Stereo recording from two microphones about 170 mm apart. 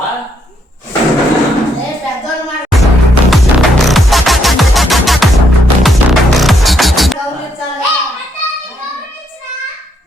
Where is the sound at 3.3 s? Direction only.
Centre (ahead or behind).